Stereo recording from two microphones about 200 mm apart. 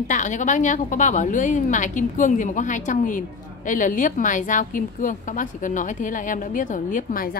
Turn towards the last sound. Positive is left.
turn(degrees=45)  # may be behind; listen again after turning